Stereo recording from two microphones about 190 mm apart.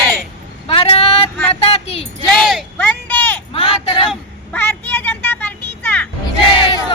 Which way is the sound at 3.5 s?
30° left (ahead or behind).